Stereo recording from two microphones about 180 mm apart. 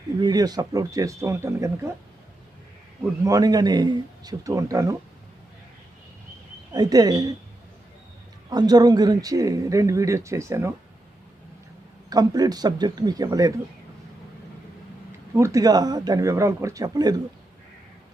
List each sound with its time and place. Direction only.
0.2 s speech: 20° right (ahead or behind)
3.2 s speech: 20° right (ahead or behind)
6.7 s speech: 20° right (ahead or behind)
8.4 s speech: 20° right (ahead or behind)
12.0 s speech: 20° right (ahead or behind)
15.4 s speech: 15° right (ahead or behind)